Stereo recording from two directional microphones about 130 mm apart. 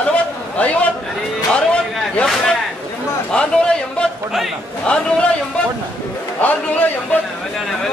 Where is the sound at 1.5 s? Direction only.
5° left (ahead or behind).